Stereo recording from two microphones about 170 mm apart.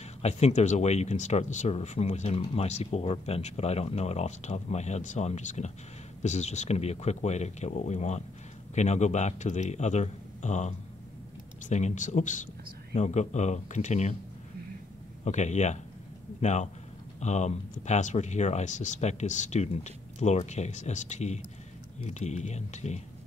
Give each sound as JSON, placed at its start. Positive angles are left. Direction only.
{"t": 0.2, "sound": "speech", "side_deg": 40}
{"t": 11.7, "sound": "speech", "side_deg": 45}
{"t": 15.2, "sound": "a man's voice", "side_deg": 40}